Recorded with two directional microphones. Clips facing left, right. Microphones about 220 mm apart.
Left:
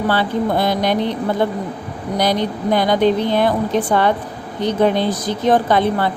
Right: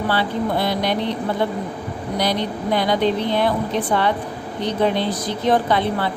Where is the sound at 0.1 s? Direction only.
45° left (ahead or behind).